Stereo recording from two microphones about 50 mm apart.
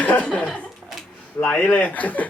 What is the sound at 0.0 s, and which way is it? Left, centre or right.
Chuckle, left.